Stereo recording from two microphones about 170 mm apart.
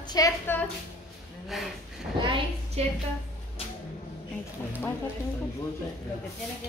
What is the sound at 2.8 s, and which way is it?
Speech, 35° right (ahead or behind).